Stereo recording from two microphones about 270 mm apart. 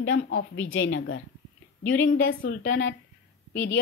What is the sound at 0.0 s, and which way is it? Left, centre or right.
Speech, left.